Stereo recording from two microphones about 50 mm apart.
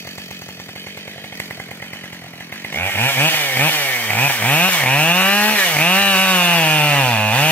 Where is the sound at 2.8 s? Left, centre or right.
Left.